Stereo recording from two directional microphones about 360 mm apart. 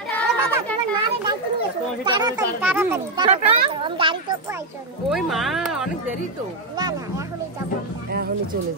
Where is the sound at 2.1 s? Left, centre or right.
Centre.